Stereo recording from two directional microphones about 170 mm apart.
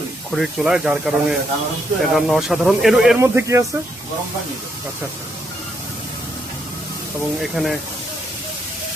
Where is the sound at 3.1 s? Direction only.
15° right (ahead or behind).